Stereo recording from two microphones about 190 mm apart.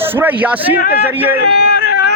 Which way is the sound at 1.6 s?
55° left (ahead or behind).